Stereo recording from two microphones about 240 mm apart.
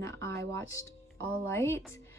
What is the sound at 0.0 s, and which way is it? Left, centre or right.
Speech, centre.